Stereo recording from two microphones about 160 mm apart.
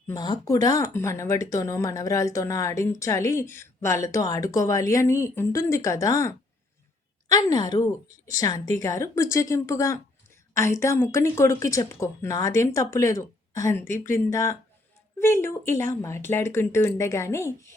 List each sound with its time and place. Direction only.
0.1 s speech: 25° left (ahead or behind)